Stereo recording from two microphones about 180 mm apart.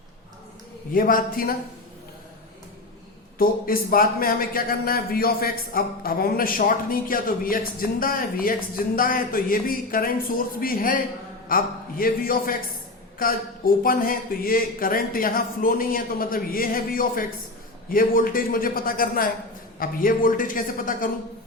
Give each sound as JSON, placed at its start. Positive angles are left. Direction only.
{"t": 0.9, "sound": "speech", "side_deg": 50}
{"t": 3.3, "sound": "speech", "side_deg": 55}